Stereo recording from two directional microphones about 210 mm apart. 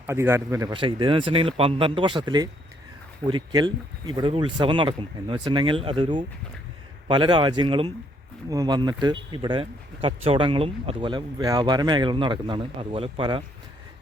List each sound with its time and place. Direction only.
0.1 s speech: 10° right (ahead or behind)